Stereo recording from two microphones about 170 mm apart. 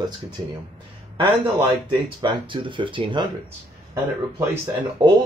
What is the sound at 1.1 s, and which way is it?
Speech, 30° right (ahead or behind).